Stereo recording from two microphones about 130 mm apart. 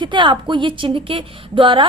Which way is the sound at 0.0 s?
40° right (ahead or behind).